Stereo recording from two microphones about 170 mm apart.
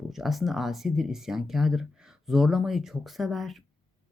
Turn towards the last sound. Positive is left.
turn(degrees=0)  # may be behind; listen again after turning